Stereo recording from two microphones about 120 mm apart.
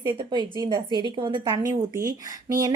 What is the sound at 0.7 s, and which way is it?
Speech, 35° right (ahead or behind).